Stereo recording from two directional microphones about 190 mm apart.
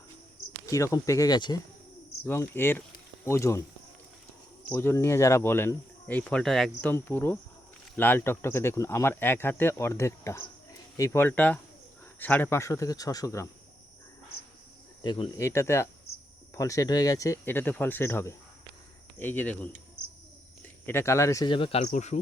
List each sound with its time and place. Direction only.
0.6 s speech: 15° left (ahead or behind)
4.7 s speech: 10° left (ahead or behind)
6.9 s speech: 10° left (ahead or behind)
15.0 s speech: 25° left (ahead or behind)
20.8 s speech: 15° left (ahead or behind); by 22.2 s 35° left (ahead or behind)